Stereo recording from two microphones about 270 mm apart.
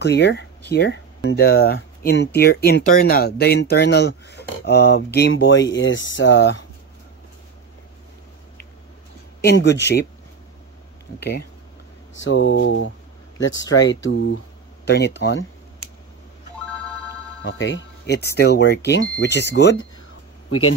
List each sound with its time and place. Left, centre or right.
0.0 s speech: left
9.4 s speech: left
11.1 s speech: left
16.6 s ringtone: centre
17.4 s speech: left
20.4 s speech: left